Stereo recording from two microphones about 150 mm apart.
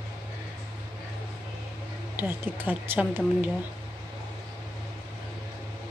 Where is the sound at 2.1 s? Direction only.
15° right (ahead or behind).